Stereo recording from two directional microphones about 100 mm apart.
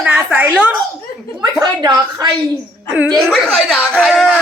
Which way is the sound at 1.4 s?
45° right (ahead or behind).